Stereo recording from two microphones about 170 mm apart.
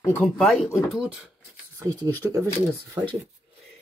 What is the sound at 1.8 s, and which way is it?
Speech, 15° right (ahead or behind).